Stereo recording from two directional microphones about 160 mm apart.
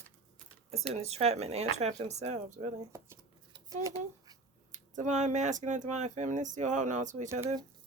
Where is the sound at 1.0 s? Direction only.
40° right (ahead or behind).